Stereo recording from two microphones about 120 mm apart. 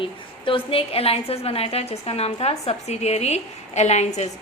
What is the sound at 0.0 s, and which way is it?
A woman's voice, 45° left (ahead or behind).